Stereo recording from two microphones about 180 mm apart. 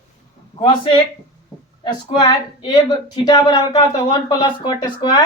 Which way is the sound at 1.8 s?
25° left (ahead or behind).